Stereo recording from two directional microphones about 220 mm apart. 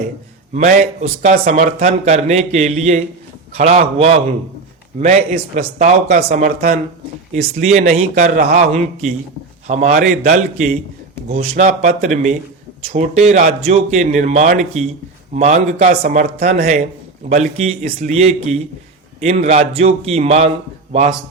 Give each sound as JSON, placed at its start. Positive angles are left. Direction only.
{"t": 0.5, "sound": "a man's voice", "side_deg": -30}